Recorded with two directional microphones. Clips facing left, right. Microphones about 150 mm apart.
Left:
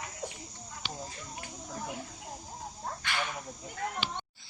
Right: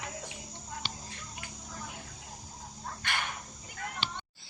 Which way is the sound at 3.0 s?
55° right (ahead or behind).